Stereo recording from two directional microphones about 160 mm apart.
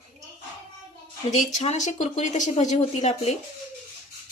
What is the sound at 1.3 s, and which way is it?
A woman's voice, 50° left (ahead or behind).